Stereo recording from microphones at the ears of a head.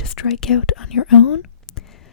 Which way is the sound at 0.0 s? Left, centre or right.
Left.